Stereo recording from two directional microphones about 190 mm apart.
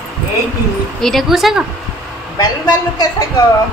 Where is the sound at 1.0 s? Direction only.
Centre (ahead or behind).